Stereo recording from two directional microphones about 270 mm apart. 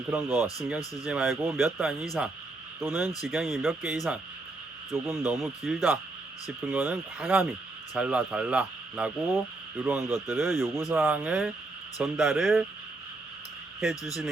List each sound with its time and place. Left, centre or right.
0.1 s speech: centre